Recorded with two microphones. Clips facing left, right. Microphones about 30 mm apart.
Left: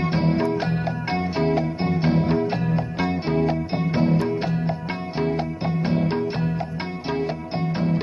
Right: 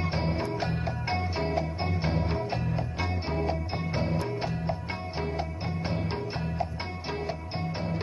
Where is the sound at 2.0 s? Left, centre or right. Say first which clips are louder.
Left 10 dB; left.